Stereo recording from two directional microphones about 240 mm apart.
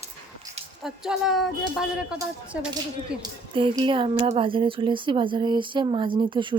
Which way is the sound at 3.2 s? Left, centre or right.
Centre.